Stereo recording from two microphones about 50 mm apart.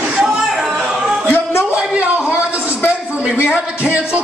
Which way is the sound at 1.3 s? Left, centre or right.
Left.